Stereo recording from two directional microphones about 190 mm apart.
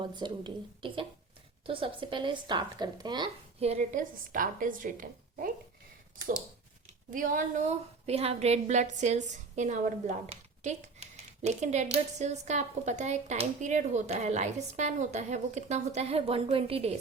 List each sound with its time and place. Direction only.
0.0 s a woman's voice: 25° right (ahead or behind); by 5.5 s 45° right (ahead or behind)
7.1 s a woman's voice: 45° right (ahead or behind)